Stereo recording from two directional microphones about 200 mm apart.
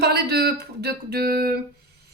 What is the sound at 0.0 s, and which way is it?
Speech, 50° right (ahead or behind).